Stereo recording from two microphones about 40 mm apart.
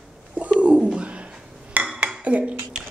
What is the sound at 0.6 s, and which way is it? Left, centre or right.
Bird, right.